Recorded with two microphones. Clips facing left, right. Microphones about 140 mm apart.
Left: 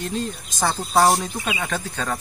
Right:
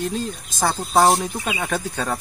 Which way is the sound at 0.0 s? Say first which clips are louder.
Right 1 dB; 5° right (ahead or behind).